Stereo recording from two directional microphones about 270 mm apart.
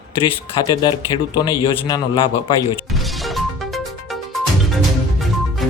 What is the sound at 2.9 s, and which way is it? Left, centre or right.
Music, centre.